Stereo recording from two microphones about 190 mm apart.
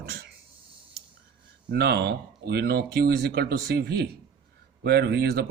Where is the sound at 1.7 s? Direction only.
60° right (ahead or behind).